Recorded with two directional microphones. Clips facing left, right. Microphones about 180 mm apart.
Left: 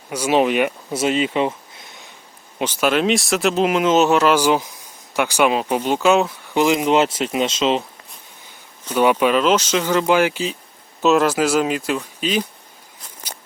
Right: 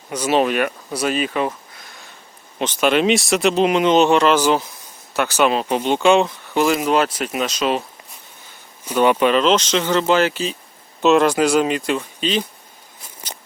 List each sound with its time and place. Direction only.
0.1 s speech: 10° left (ahead or behind)
2.6 s speech: 5° left (ahead or behind)
6.5 s speech: 15° left (ahead or behind)
9.0 s speech: 10° left (ahead or behind)
11.0 s speech: centre (ahead or behind)